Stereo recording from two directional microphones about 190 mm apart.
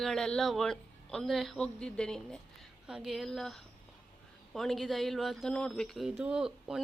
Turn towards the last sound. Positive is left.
turn(degrees=-5)  # may be behind; listen again after turning